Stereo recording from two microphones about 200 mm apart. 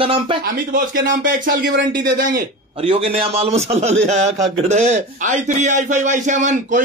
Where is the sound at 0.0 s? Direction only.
25° right (ahead or behind).